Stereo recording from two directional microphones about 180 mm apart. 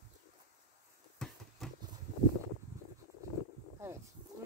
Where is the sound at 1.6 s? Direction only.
Centre (ahead or behind).